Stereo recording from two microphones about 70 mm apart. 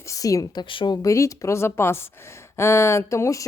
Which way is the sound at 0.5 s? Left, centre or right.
Left.